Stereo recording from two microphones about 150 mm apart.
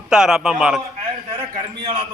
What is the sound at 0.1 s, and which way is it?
Speech, 5° right (ahead or behind).